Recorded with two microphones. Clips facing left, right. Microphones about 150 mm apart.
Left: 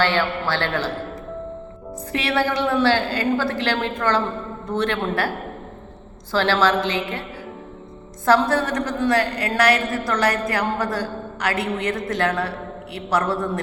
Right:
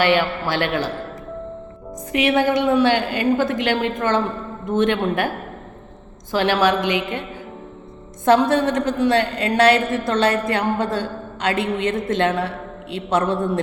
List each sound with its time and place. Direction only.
0.0 s a woman's voice: 15° right (ahead or behind)
2.1 s a woman's voice: 15° right (ahead or behind)
6.3 s a woman's voice: 15° right (ahead or behind)